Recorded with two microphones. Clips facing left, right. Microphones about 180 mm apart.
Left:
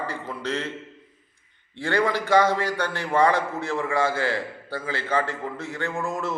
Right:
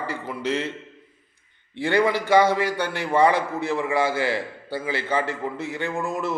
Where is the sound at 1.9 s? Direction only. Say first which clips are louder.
Right 2 dB; 10° right (ahead or behind).